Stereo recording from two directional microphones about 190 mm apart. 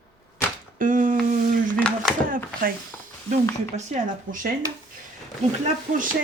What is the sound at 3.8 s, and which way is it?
Speech, 35° right (ahead or behind).